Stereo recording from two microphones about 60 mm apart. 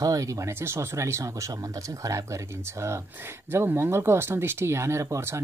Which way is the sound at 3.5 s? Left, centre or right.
Right.